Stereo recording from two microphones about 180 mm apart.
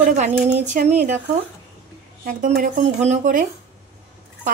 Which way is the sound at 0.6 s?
40° right (ahead or behind).